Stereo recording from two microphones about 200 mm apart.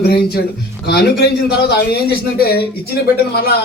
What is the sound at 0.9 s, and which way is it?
A man's voice, 55° left (ahead or behind).